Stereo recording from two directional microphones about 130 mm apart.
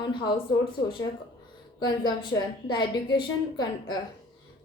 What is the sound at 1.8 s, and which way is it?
A woman's voice, 30° left (ahead or behind).